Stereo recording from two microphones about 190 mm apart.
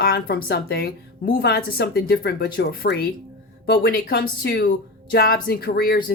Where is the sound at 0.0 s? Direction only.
50° left (ahead or behind).